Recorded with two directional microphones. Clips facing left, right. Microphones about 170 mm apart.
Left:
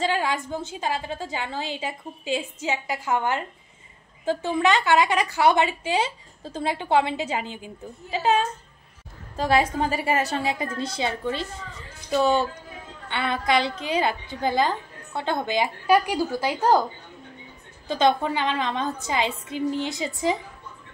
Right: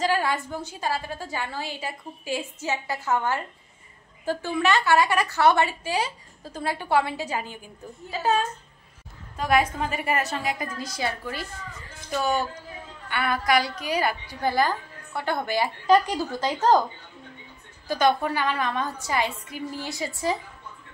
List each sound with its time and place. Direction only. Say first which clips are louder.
0.0 s a woman's voice: even; 20° left (ahead or behind)
17.8 s a woman's voice: left 1 dB; 25° left (ahead or behind)